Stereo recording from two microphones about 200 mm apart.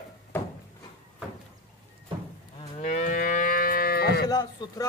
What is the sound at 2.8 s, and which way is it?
Moo, 40° left (ahead or behind).